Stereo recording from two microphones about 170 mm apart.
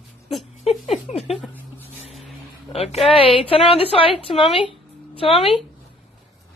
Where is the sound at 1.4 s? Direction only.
10° left (ahead or behind).